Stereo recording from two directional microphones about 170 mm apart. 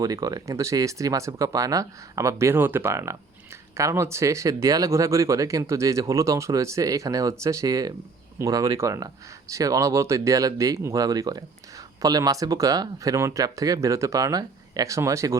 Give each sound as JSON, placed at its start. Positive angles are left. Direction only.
{"t": 0.0, "sound": "speech", "side_deg": -20}